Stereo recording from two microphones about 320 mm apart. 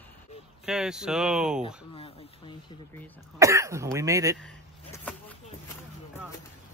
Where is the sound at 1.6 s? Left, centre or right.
Centre.